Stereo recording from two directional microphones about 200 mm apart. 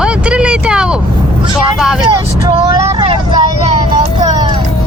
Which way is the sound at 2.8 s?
25° right (ahead or behind).